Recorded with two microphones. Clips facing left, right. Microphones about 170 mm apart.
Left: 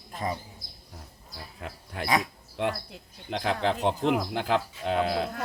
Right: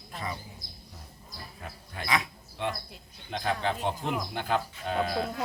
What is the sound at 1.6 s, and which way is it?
Speech, 75° left (ahead or behind).